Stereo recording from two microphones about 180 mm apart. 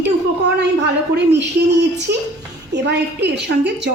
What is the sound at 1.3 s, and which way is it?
A woman's voice, 70° right (ahead or behind).